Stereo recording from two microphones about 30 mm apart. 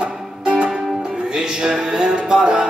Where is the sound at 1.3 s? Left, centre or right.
Right.